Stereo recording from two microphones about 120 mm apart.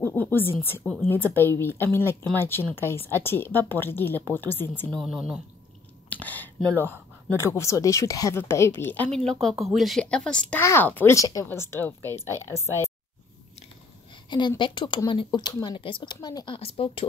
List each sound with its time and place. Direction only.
0.0 s a woman's voice: 15° left (ahead or behind)
4.9 s speech: 5° right (ahead or behind)
6.0 s a sound: 15° left (ahead or behind)
7.2 s a woman's voice: 20° left (ahead or behind)
9.1 s speech: 5° left (ahead or behind)
10.6 s speech: 20° left (ahead or behind)
11.1 s a woman's voice: 30° left (ahead or behind)
14.6 s speech: 40° left (ahead or behind)
16.5 s speech: 50° left (ahead or behind)